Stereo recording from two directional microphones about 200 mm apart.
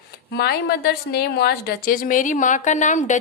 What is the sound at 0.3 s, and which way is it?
A woman's voice, 50° left (ahead or behind).